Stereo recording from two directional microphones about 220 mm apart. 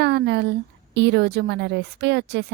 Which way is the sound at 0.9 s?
50° right (ahead or behind).